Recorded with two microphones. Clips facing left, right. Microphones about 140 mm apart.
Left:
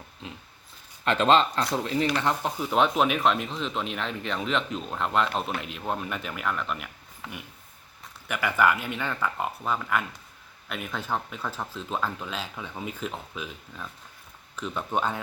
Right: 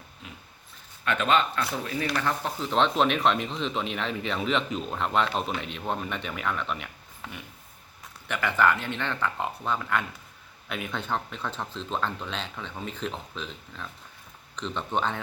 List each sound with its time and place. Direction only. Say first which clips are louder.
1.0 s speech: left 3 dB; 30° left (ahead or behind)
2.1 s speech: left 2 dB; 15° left (ahead or behind)
8.3 s speech: even; 10° left (ahead or behind)